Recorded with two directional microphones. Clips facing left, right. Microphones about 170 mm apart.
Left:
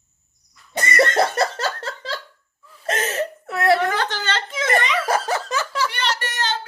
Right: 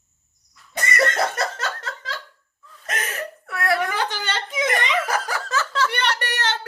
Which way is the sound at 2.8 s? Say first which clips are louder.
Left 7 dB; 30° left (ahead or behind).